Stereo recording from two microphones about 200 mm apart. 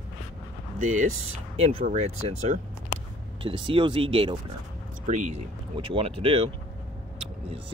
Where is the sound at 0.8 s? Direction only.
40° right (ahead or behind).